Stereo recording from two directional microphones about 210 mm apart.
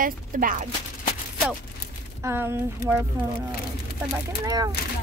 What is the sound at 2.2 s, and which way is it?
Speech, 10° right (ahead or behind).